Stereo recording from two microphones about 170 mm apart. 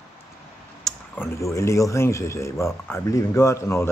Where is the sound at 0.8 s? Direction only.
10° left (ahead or behind).